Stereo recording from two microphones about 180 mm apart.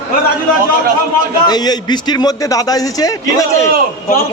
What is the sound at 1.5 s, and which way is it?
A man's voice, 20° left (ahead or behind).